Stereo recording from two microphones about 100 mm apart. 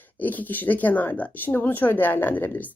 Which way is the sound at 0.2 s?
15° left (ahead or behind).